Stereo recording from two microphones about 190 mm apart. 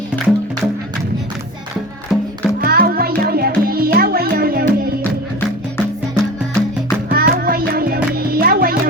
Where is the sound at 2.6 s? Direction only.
50° right (ahead or behind).